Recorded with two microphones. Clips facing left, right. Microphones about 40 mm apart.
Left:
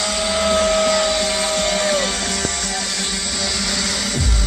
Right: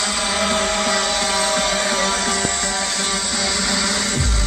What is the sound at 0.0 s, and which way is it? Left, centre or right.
Vehicle, centre.